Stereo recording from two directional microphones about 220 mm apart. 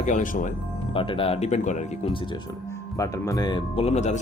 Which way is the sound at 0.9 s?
25° left (ahead or behind).